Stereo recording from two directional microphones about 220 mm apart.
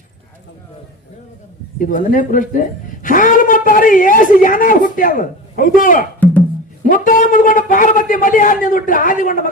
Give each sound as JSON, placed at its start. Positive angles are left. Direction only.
{"t": 1.8, "sound": "speech", "side_deg": 40}